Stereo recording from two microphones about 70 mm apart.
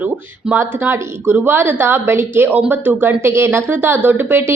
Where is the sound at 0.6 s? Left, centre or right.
Right.